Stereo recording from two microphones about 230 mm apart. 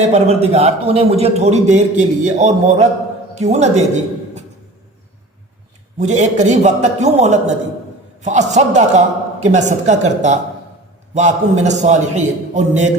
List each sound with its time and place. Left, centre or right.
0.1 s a man's voice: right
6.0 s a man's voice: right